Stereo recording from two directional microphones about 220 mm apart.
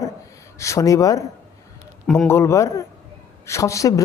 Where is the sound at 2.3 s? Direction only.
15° left (ahead or behind).